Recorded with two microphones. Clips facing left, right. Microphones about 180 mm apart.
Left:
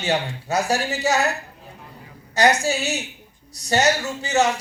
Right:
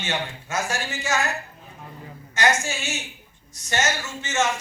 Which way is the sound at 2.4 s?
35° left (ahead or behind).